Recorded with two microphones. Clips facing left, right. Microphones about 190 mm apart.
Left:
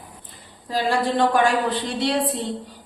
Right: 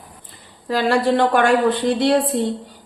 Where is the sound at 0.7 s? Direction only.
70° right (ahead or behind).